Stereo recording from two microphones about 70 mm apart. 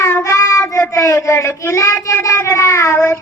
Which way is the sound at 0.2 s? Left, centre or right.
Left.